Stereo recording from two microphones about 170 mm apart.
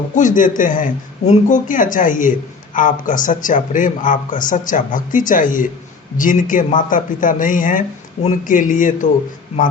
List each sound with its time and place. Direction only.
0.2 s speech: 50° left (ahead or behind)